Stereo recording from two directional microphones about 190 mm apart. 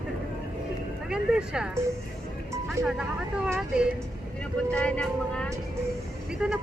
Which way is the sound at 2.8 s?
5° right (ahead or behind).